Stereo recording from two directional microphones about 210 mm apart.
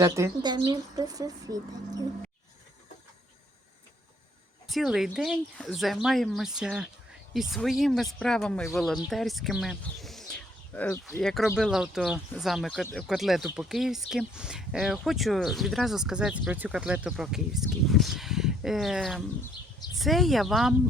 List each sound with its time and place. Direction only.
0.0 s speech: 20° right (ahead or behind)
4.7 s speech: centre (ahead or behind)